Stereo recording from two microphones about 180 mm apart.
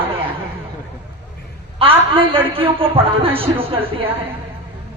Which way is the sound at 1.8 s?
30° right (ahead or behind).